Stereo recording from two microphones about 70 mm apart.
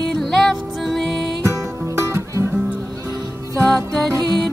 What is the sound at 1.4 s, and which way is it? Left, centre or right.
Music, right.